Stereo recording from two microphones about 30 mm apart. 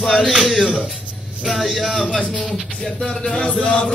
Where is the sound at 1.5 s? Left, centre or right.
Centre.